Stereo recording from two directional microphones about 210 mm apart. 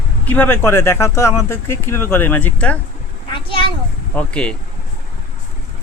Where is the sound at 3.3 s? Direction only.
25° left (ahead or behind).